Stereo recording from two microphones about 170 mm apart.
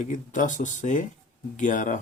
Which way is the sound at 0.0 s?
50° left (ahead or behind).